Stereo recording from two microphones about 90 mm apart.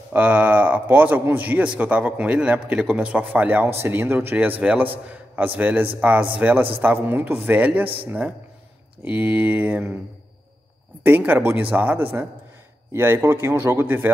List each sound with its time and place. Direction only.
0.1 s a man's voice: 15° right (ahead or behind)
9.0 s a man's voice: 20° right (ahead or behind)
11.1 s a man's voice: 20° right (ahead or behind)